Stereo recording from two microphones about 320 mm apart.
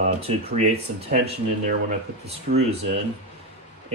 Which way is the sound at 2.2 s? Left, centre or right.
Right.